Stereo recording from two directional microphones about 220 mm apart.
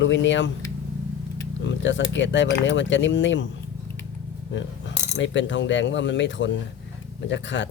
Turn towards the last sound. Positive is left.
turn(degrees=55)  # may be behind; listen again after turning